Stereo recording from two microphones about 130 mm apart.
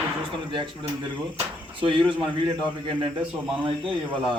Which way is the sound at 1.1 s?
40° right (ahead or behind).